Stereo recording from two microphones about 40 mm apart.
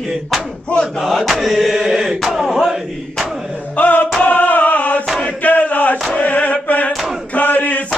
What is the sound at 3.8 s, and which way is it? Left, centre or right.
Music, left.